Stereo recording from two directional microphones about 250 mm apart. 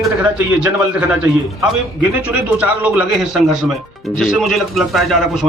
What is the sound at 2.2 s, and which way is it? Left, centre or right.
A man's voice, centre.